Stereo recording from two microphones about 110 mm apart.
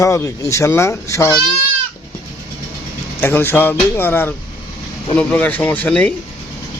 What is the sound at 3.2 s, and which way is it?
A man's voice, 20° left (ahead or behind).